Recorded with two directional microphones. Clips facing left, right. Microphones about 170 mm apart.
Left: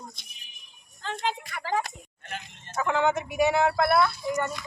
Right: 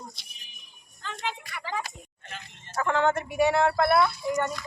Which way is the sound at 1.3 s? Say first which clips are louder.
Left 6 dB; 45° left (ahead or behind).